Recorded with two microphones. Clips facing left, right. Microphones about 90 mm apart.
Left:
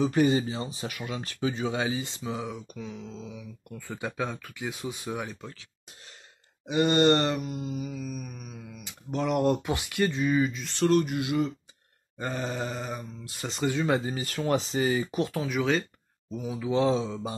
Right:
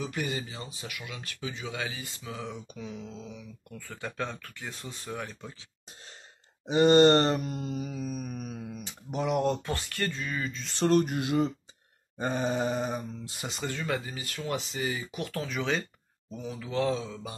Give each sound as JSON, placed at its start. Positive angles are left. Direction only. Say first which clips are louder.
{"t": 0.0, "sound": "speech", "louder": "left 10 dB", "side_deg": 30}
{"t": 2.4, "sound": "speech", "louder": "left 2 dB", "side_deg": 0}
{"t": 3.7, "sound": "speech", "louder": "left 4 dB", "side_deg": 15}
{"t": 6.7, "sound": "speech", "louder": "right 3 dB", "side_deg": -30}
{"t": 7.3, "sound": "speech", "louder": "even", "side_deg": 5}
{"t": 7.9, "sound": "speech", "louder": "right 1 dB", "side_deg": -40}
{"t": 9.1, "sound": "speech", "louder": "left 2 dB", "side_deg": -5}
{"t": 10.9, "sound": "speech", "louder": "even", "side_deg": -40}
{"t": 12.2, "sound": "speech", "louder": "right 3 dB", "side_deg": -20}
{"t": 13.8, "sound": "speech", "louder": "left 6 dB", "side_deg": 25}
{"t": 15.4, "sound": "speech", "louder": "left 2 dB", "side_deg": 5}